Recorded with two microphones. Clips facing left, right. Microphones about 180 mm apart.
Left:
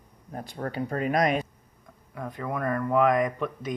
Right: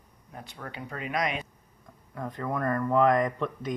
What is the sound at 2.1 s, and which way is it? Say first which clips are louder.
A man's voice: even; 10° left (ahead or behind).